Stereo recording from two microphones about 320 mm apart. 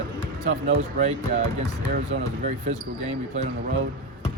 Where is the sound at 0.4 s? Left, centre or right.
Right.